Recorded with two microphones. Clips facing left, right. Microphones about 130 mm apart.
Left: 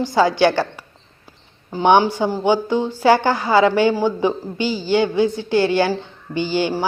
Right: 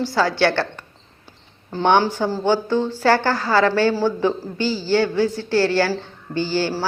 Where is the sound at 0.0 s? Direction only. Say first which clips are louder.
Left 3 dB; 15° left (ahead or behind).